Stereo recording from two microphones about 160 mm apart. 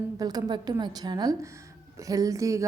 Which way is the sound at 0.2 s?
25° right (ahead or behind).